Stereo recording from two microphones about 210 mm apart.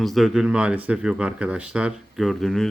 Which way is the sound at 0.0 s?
Centre (ahead or behind).